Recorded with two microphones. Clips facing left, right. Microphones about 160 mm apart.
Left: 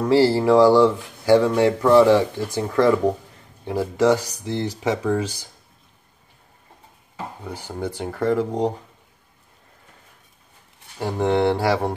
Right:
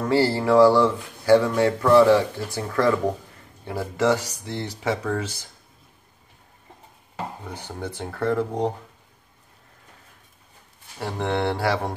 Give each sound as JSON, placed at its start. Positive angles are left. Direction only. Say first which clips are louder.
{"t": 0.0, "sound": "speech", "louder": "left 4 dB", "side_deg": 15}
{"t": 7.4, "sound": "speech", "louder": "left 4 dB", "side_deg": 10}
{"t": 11.0, "sound": "speech", "louder": "left 5 dB", "side_deg": 15}